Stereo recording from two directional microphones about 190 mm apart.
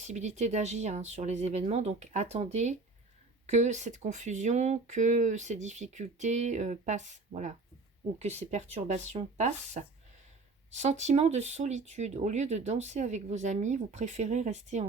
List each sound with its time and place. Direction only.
0.0 s speech: 40° right (ahead or behind)